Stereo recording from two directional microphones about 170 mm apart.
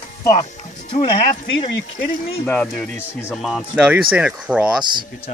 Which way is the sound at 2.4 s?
5° left (ahead or behind).